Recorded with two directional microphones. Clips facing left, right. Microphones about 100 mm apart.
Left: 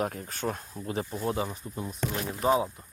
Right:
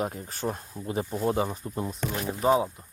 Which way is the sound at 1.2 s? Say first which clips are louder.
Right 5 dB; 30° right (ahead or behind).